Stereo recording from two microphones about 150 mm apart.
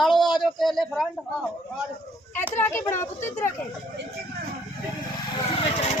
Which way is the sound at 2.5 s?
15° left (ahead or behind).